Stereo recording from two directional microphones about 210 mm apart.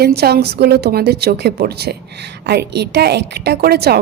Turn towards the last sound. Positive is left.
turn(degrees=-50)  # may be behind; listen again after turning